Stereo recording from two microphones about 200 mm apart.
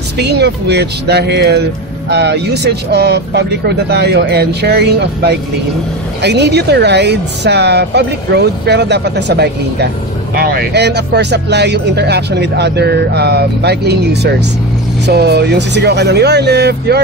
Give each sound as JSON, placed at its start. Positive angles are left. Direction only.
{"t": 0.2, "sound": "speech", "side_deg": -55}